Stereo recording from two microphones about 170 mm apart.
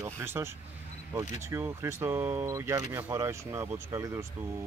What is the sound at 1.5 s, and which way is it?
Speech, 15° right (ahead or behind).